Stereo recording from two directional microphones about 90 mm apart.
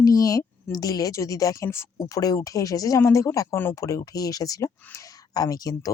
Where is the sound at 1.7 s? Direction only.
30° left (ahead or behind).